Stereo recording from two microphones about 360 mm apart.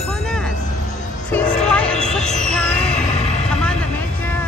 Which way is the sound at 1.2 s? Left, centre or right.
Centre.